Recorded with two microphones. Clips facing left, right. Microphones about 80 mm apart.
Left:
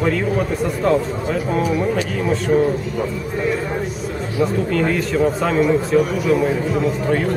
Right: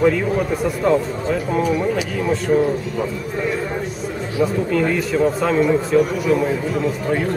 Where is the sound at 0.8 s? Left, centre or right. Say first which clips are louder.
Right 1 dB; centre.